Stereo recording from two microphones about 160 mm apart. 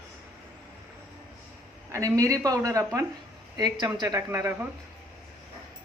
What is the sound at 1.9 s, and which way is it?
A woman's voice, 20° right (ahead or behind).